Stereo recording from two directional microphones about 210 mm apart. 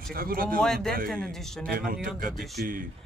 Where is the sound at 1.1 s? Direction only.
5° left (ahead or behind).